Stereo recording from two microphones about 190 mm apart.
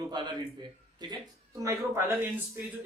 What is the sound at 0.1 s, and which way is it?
Speech, 25° right (ahead or behind).